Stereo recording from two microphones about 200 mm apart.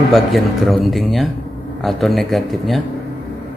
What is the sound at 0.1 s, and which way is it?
A man's voice, centre (ahead or behind).